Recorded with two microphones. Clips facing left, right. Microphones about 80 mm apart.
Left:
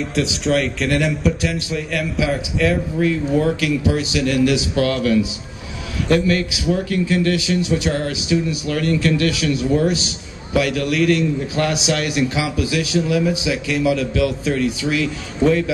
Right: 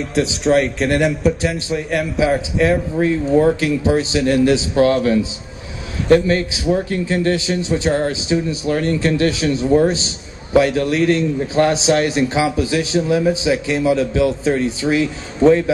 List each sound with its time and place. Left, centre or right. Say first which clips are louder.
0.6 s a man's voice: right 3 dB; right
3.0 s a man's voice: right 4 dB; right